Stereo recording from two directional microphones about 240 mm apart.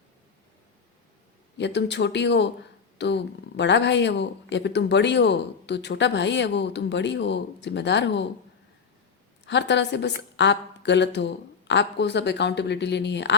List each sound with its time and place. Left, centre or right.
1.5 s a woman's voice: left
9.5 s a woman's voice: left